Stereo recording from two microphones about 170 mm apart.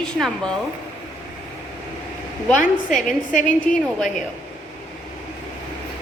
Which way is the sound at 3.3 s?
50° left (ahead or behind).